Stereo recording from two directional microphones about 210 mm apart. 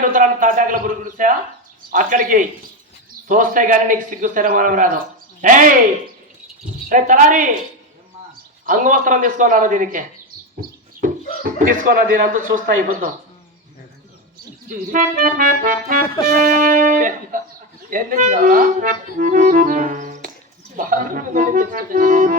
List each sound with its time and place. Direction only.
0.0 s speech: 40° right (ahead or behind)
6.8 s speech: 40° right (ahead or behind)
8.6 s speech: 40° right (ahead or behind)
14.9 s speech: 40° right (ahead or behind)